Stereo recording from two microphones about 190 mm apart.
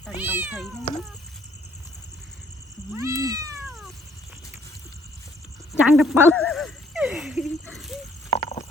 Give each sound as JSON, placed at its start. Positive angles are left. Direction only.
{"t": 0.1, "sound": "cat", "side_deg": -10}
{"t": 2.9, "sound": "cat", "side_deg": -15}
{"t": 5.8, "sound": "cat", "side_deg": -5}
{"t": 6.3, "sound": "speech", "side_deg": 5}
{"t": 8.3, "sound": "stomach rumble", "side_deg": 35}